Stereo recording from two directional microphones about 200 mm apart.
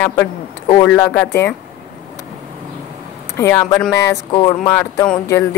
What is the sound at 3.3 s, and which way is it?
Speech, 15° left (ahead or behind).